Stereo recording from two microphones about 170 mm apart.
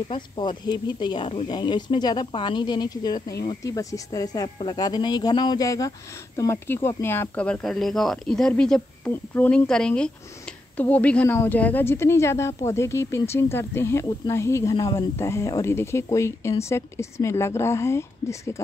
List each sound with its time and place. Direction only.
0.1 s speech: 25° left (ahead or behind)